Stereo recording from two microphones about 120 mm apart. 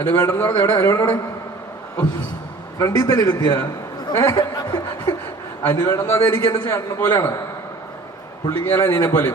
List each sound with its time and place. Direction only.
0.0 s a man's voice: 20° left (ahead or behind)
2.7 s a man's voice: 30° left (ahead or behind)
8.4 s a man's voice: 20° left (ahead or behind)